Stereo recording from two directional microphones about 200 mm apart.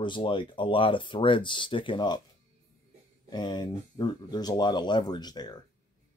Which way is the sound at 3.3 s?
20° left (ahead or behind).